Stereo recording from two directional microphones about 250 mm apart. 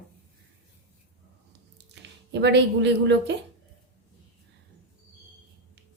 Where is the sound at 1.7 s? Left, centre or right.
Right.